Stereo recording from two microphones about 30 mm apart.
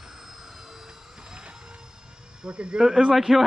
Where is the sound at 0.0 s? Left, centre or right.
Centre.